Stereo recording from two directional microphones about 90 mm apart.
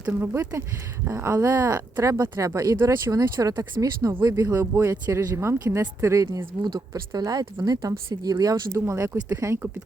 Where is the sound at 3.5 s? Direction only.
60° right (ahead or behind).